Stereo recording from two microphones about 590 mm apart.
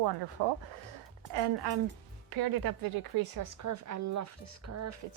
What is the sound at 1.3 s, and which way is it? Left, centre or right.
A woman's voice, right.